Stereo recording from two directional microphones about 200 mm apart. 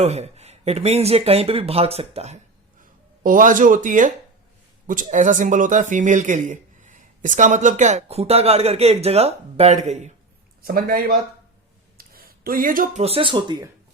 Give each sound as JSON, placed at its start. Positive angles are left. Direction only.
{"t": 0.0, "sound": "speech", "side_deg": -35}
{"t": 10.6, "sound": "a man's voice", "side_deg": -50}